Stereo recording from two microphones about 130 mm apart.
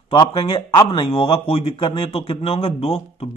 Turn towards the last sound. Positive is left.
turn(degrees=50)  # may be behind; listen again after turning